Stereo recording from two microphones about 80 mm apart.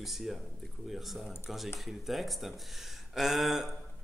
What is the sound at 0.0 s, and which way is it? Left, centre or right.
Speech, centre.